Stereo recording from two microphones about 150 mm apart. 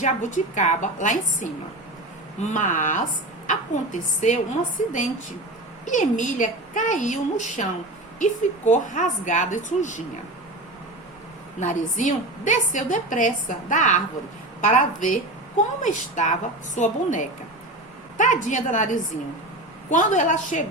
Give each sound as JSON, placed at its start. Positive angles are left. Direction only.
{"t": 0.0, "sound": "a woman's voice", "side_deg": 55}
{"t": 11.6, "sound": "a woman's voice", "side_deg": 60}